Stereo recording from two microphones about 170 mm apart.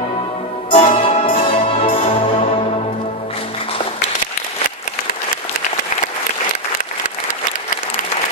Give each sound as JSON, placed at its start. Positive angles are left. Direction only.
{"t": 0.7, "sound": "music", "side_deg": 35}